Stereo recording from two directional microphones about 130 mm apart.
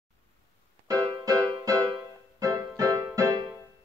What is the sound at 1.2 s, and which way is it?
Music, 30° right (ahead or behind).